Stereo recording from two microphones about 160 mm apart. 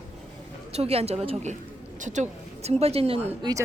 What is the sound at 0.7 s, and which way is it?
A woman's voice, 40° right (ahead or behind).